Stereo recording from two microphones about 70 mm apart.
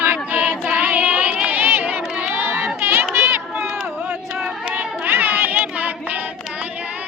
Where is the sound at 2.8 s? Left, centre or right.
Right.